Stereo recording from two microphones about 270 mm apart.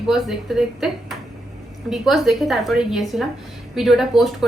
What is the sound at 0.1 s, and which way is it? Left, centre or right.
Speech, centre.